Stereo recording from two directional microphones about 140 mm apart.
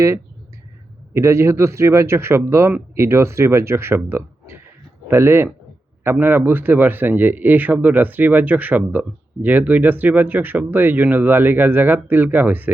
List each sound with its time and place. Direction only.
1.1 s speech: 20° right (ahead or behind)